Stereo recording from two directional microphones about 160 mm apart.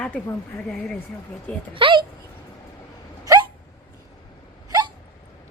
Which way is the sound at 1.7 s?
35° right (ahead or behind).